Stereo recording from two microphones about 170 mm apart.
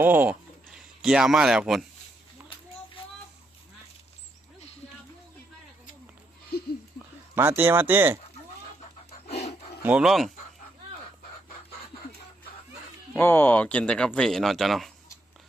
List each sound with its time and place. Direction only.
0.0 s speech: 10° right (ahead or behind)
6.5 s a sound: 65° left (ahead or behind)
7.3 s speech: 15° right (ahead or behind)
9.8 s speech: 5° right (ahead or behind)
13.1 s speech: 10° left (ahead or behind)